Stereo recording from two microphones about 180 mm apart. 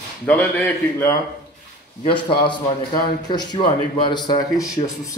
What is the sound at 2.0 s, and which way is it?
A man's voice, 25° left (ahead or behind).